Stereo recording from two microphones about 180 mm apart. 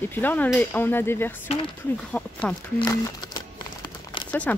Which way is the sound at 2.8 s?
20° left (ahead or behind).